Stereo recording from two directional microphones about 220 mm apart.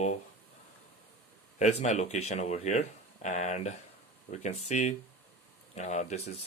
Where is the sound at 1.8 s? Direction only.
30° left (ahead or behind).